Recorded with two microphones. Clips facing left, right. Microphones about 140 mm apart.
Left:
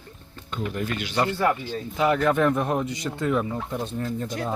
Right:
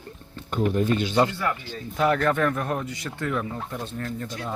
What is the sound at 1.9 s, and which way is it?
Speech, 5° left (ahead or behind).